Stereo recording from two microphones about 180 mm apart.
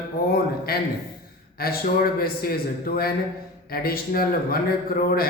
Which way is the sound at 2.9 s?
60° left (ahead or behind).